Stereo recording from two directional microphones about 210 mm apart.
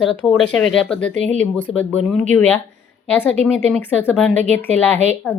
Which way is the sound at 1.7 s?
30° left (ahead or behind).